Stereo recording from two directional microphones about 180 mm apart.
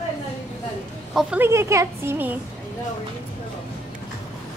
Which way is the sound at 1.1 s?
10° right (ahead or behind).